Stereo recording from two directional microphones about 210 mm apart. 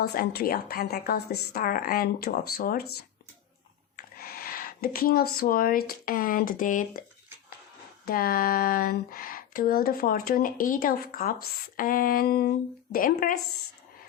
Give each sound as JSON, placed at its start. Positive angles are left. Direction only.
{"t": 0.0, "sound": "speech", "side_deg": 45}
{"t": 3.9, "sound": "speech", "side_deg": 45}
{"t": 8.0, "sound": "speech", "side_deg": 45}